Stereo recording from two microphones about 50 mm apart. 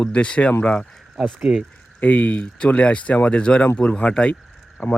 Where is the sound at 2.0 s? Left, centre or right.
Left.